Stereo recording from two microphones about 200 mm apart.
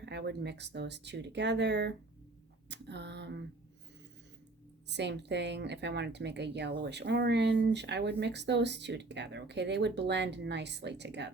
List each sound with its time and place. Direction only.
0.0 s speech: 60° right (ahead or behind)
4.9 s speech: 60° right (ahead or behind)